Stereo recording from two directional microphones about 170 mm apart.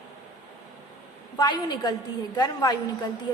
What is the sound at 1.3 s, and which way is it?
Speech, 25° left (ahead or behind).